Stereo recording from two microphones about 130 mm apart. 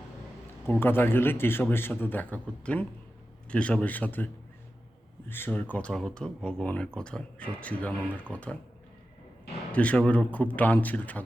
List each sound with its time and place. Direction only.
0.7 s speech: 15° left (ahead or behind)
5.3 s speech: 15° left (ahead or behind)
9.7 s speech: 10° left (ahead or behind)